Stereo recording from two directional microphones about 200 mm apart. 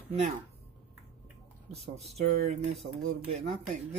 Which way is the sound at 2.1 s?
30° right (ahead or behind).